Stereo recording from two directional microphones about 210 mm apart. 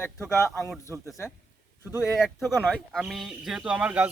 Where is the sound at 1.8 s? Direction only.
10° right (ahead or behind).